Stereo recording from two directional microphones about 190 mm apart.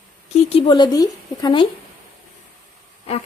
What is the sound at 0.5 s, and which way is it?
Speech, 25° left (ahead or behind).